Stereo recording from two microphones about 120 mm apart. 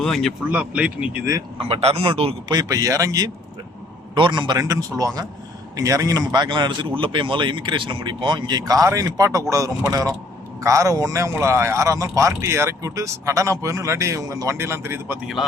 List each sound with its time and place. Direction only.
0.0 s speech: 5° left (ahead or behind)
0.5 s speech: 10° right (ahead or behind)
1.5 s a man's voice: 55° right (ahead or behind)
2.5 s a man's voice: 30° right (ahead or behind)
4.5 s a man's voice: 30° right (ahead or behind)